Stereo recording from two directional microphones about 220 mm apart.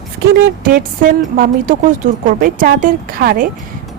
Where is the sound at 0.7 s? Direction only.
40° right (ahead or behind).